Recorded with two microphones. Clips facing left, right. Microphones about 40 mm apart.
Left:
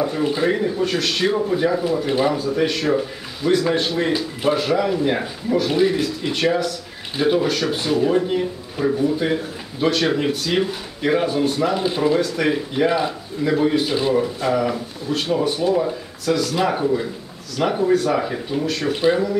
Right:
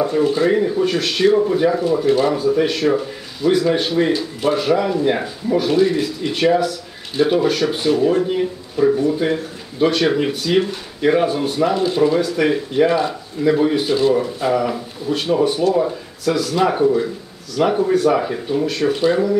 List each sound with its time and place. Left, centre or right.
0.2 s speech: centre
0.5 s speech: centre
2.0 s speech: centre
2.3 s speech: centre
11.7 s speech: centre
12.2 s speech: centre
13.4 s speech: centre